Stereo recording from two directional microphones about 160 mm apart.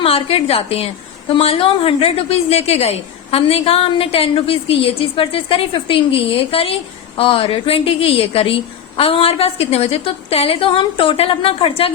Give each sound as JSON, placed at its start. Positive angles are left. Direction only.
{"t": 0.0, "sound": "a woman's voice", "side_deg": 40}